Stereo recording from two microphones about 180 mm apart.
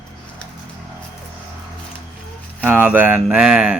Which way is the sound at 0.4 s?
5° left (ahead or behind).